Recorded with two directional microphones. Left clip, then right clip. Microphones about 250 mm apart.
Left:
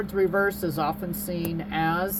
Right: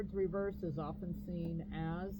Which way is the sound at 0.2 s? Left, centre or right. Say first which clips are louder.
Left 15 dB; left.